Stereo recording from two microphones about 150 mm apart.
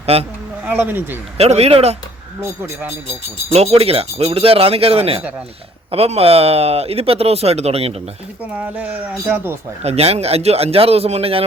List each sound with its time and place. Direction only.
0.0 s speech: 40° right (ahead or behind)
0.6 s speech: 10° right (ahead or behind)
1.4 s speech: 45° right (ahead or behind)
2.4 s speech: 15° right (ahead or behind)
3.1 s speech: 40° right (ahead or behind)
8.5 s speech: 10° right (ahead or behind)
9.8 s speech: 45° right (ahead or behind)